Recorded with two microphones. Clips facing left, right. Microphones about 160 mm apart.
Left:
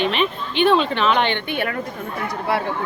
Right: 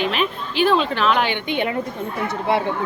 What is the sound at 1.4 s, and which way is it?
A woman's voice, 20° right (ahead or behind).